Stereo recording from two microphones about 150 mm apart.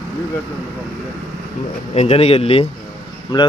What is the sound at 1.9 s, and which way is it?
Speech, 45° left (ahead or behind).